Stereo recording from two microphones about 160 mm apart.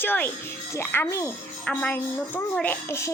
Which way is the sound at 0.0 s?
10° left (ahead or behind).